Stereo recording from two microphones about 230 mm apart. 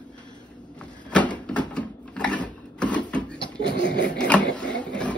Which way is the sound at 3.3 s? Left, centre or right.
Centre.